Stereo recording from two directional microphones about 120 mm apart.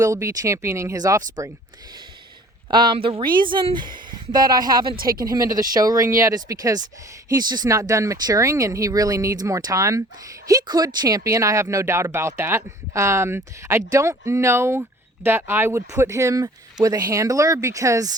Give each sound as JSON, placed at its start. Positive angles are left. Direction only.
{"t": 0.0, "sound": "speech", "side_deg": -25}
{"t": 2.6, "sound": "speech", "side_deg": -40}